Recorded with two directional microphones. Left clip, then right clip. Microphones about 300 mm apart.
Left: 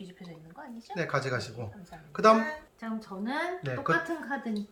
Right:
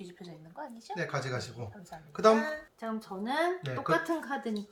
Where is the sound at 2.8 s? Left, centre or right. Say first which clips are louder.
Left 1 dB; right.